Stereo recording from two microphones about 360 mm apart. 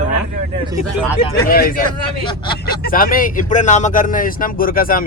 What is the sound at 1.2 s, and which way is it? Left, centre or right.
Speech, left.